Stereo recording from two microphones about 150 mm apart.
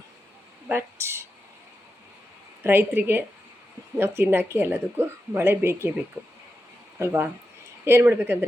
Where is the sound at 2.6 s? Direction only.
15° right (ahead or behind).